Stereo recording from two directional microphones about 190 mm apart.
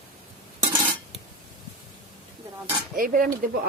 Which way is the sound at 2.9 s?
45° right (ahead or behind).